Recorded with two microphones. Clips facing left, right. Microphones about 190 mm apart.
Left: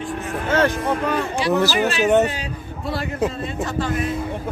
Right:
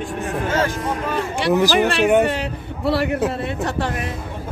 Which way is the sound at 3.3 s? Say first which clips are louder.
Right 2 dB; 65° right (ahead or behind).